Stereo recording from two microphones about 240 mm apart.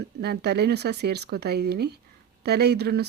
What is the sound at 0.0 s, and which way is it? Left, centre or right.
Speech, right.